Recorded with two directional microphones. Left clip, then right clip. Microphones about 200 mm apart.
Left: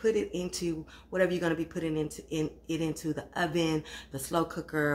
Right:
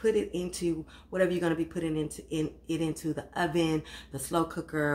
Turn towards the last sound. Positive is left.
turn(degrees=5)  # may be behind; listen again after turning